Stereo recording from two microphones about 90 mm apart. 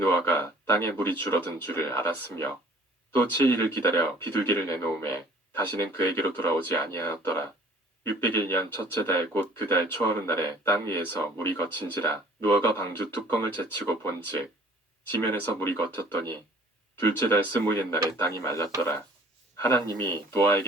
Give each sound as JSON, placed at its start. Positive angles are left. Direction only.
{"t": 0.0, "sound": "speech", "side_deg": 30}